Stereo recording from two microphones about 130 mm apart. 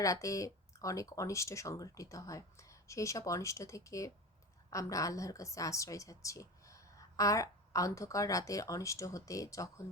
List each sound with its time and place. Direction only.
0.0 s a woman's voice: 25° left (ahead or behind)